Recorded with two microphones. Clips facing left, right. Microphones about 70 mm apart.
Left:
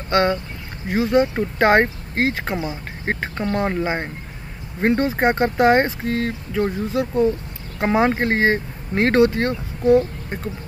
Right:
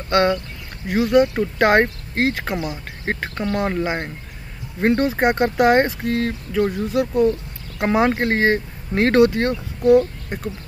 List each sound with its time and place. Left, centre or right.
0.1 s speech: centre
3.4 s speech: left
4.7 s speech: centre
5.0 s speech: left
5.9 s speech: centre
6.6 s speech: left